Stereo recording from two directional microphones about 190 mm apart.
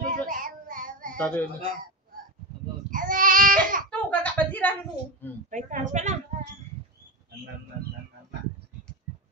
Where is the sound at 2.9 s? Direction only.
45° right (ahead or behind).